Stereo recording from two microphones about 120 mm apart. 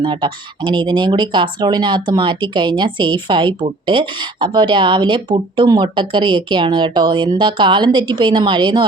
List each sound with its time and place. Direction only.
0.0 s speech: 40° right (ahead or behind)